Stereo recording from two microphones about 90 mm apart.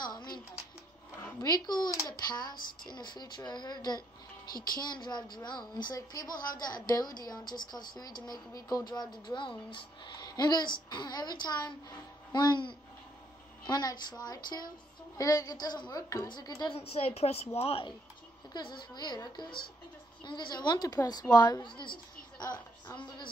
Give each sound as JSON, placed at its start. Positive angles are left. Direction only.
{"t": 0.0, "sound": "music", "side_deg": 50}
{"t": 1.4, "sound": "a woman's voice", "side_deg": 50}
{"t": 16.6, "sound": "a woman's voice", "side_deg": 90}
{"t": 18.5, "sound": "a woman's voice", "side_deg": 55}